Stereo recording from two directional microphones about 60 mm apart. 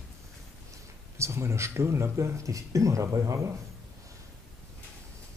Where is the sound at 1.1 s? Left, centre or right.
Right.